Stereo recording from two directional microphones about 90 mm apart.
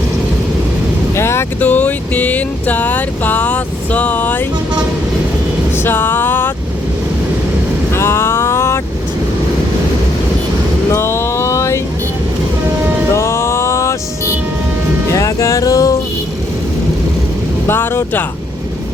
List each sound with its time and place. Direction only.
1.1 s vehicle: 30° left (ahead or behind)
1.6 s vehicle: 20° left (ahead or behind)
5.8 s vehicle: 20° left (ahead or behind)
7.9 s vehicle: 30° left (ahead or behind)
10.8 s a sound: 30° left (ahead or behind)
13.1 s a sound: 30° left (ahead or behind)
15.1 s music: 35° left (ahead or behind)
17.7 s vehicle: 25° left (ahead or behind)